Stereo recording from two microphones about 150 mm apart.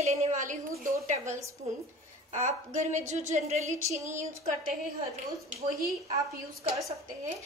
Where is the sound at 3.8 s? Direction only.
20° right (ahead or behind).